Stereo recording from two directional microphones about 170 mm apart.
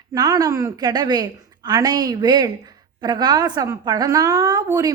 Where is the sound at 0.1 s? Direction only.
20° right (ahead or behind).